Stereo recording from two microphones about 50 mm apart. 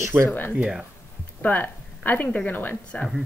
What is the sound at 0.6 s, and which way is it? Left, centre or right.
Speech, centre.